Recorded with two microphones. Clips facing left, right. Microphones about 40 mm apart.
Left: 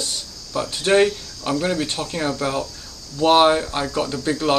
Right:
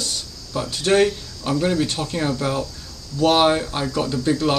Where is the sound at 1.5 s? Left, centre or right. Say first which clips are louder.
Right 1 dB; centre.